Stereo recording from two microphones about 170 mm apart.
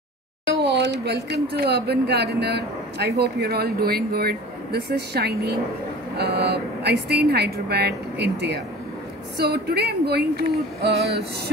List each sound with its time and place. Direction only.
0.5 s speech: 90° right
9.4 s speech: 70° right (ahead or behind)